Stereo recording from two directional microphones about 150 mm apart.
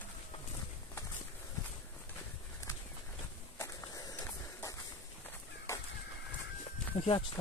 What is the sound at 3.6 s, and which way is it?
Walk, 25° left (ahead or behind).